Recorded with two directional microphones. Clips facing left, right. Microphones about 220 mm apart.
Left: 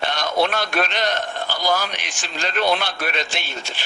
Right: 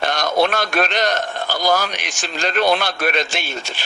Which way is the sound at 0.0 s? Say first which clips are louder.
Right 3 dB; 45° right (ahead or behind).